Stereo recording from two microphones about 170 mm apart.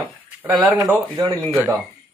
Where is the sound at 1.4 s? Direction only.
5° right (ahead or behind).